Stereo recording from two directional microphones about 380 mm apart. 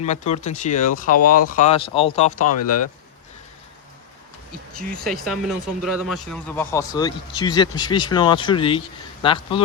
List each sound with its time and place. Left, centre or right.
0.0 s speech: centre
4.8 s speech: centre